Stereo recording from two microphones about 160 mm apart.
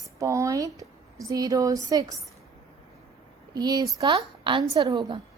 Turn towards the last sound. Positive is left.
turn(degrees=-25)  # may be behind; listen again after turning